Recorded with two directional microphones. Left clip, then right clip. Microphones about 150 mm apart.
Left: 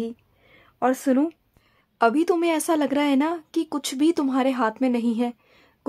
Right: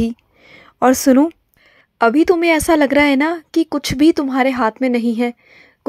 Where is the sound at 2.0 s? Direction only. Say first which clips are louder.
Right 7 dB; 25° right (ahead or behind).